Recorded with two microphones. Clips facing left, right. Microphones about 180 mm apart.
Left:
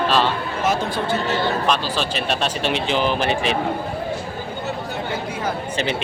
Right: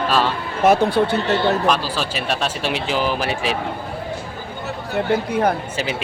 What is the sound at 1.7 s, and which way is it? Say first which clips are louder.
Speech: right 1 dB; 10° right (ahead or behind).